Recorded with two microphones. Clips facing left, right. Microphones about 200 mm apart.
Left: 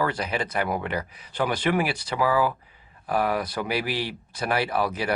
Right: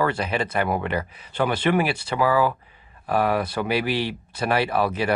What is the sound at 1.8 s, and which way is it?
Speech, 25° right (ahead or behind).